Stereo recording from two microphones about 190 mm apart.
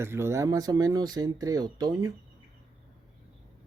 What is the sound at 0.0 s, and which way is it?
Speech, 15° right (ahead or behind).